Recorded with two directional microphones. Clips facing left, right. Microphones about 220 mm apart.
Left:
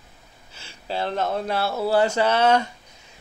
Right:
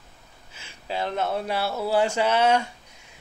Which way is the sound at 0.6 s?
35° left (ahead or behind).